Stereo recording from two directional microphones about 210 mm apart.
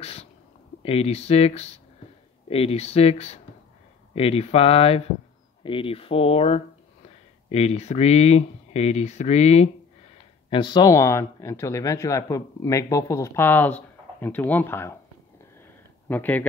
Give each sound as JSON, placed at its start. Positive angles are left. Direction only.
{"t": 0.0, "sound": "speech", "side_deg": 30}
{"t": 16.1, "sound": "speech", "side_deg": 10}